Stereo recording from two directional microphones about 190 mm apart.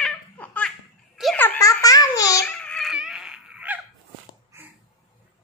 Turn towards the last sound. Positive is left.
turn(degrees=-5)  # may be behind; listen again after turning